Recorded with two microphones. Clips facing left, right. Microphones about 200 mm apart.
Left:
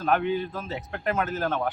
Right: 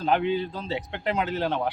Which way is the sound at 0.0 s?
15° right (ahead or behind).